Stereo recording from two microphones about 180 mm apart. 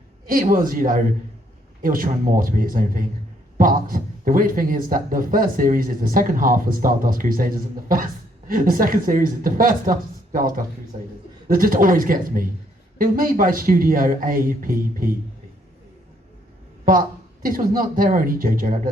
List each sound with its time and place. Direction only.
0.3 s a man's voice: 50° right (ahead or behind)
16.8 s a man's voice: 50° right (ahead or behind)